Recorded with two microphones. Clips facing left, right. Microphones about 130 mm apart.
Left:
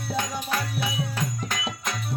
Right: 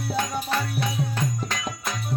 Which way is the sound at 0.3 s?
Centre (ahead or behind).